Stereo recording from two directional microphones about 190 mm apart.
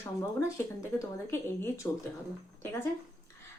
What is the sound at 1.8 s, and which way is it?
Speech, 10° left (ahead or behind).